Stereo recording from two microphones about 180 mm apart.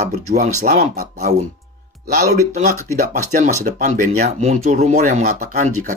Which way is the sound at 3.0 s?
45° right (ahead or behind).